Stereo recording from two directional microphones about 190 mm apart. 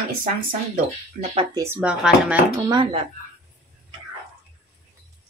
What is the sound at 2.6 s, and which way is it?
Speech, 25° right (ahead or behind).